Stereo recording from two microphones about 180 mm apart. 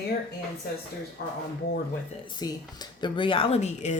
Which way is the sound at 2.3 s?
25° left (ahead or behind).